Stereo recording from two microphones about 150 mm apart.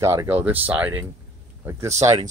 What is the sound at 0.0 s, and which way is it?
Speech, 20° right (ahead or behind).